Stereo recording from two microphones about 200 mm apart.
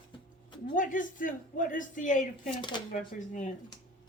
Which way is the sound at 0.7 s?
40° left (ahead or behind).